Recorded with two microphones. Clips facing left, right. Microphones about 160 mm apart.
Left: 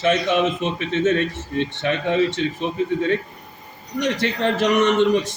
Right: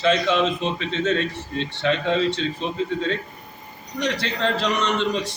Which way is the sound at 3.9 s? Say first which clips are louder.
Left 3 dB; 20° left (ahead or behind).